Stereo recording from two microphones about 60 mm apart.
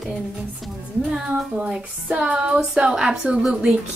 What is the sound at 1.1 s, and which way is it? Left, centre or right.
A woman's voice, centre.